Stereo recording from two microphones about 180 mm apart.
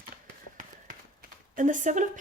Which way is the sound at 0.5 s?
50° right (ahead or behind).